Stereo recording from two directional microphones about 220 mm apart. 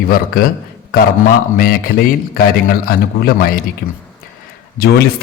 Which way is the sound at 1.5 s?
40° left (ahead or behind).